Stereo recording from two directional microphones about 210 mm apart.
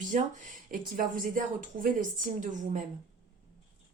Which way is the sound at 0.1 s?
35° right (ahead or behind).